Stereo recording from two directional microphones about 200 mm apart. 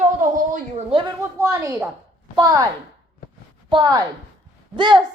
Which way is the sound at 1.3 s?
15° right (ahead or behind).